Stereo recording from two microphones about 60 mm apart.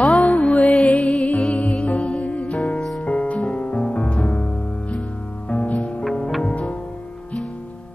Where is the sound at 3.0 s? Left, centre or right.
Left.